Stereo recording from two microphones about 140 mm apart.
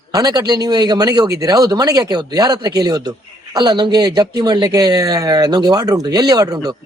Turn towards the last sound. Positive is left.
turn(degrees=-30)  # may be behind; listen again after turning